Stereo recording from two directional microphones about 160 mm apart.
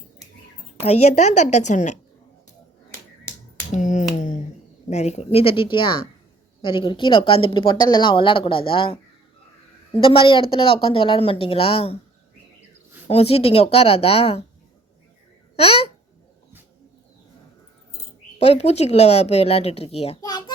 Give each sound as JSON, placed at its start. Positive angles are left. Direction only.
{"t": 0.8, "sound": "a woman's voice", "side_deg": 40}
{"t": 3.7, "sound": "finger snapping", "side_deg": 50}
{"t": 4.9, "sound": "speech", "side_deg": 45}
{"t": 10.0, "sound": "speech", "side_deg": 35}
{"t": 13.1, "sound": "speech", "side_deg": 40}
{"t": 15.5, "sound": "speech", "side_deg": 40}
{"t": 18.3, "sound": "speech", "side_deg": 40}